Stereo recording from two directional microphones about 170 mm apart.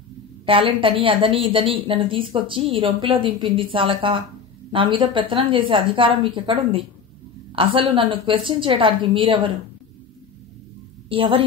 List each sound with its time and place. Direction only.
0.5 s a woman's voice: 30° right (ahead or behind)
11.1 s a woman's voice: 30° right (ahead or behind)